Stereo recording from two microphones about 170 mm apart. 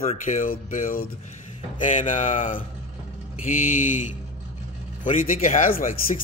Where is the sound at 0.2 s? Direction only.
50° left (ahead or behind).